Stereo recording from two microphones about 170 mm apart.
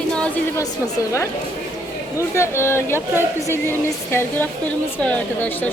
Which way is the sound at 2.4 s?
15° left (ahead or behind).